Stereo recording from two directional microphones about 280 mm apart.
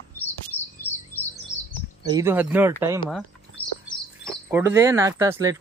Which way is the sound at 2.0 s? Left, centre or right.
Centre.